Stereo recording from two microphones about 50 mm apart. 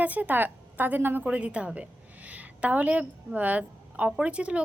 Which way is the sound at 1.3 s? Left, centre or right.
Right.